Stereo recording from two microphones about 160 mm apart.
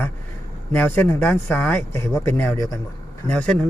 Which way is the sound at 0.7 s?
15° left (ahead or behind).